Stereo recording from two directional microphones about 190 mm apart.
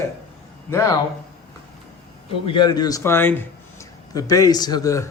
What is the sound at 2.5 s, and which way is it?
A man's voice, 25° left (ahead or behind).